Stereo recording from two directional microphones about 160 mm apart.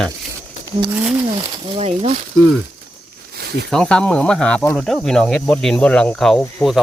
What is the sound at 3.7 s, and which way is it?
Speech, 5° left (ahead or behind).